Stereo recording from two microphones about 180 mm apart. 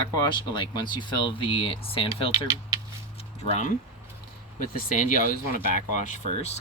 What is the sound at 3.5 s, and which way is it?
Speech, 40° left (ahead or behind).